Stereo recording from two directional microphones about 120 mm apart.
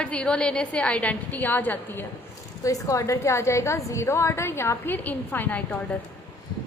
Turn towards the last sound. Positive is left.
turn(degrees=15)  # may be behind; listen again after turning